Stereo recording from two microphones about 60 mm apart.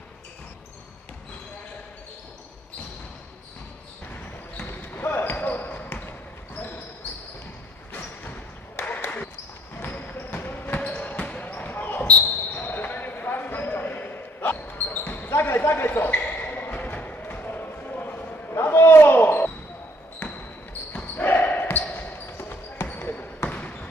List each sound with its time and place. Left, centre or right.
4.6 s basketball bounce: left
7.9 s a sound: left
9.8 s basketball bounce: left
15.2 s a sound: left
16.1 s basketball bounce: left
16.7 s music: left
18.5 s basketball bounce: left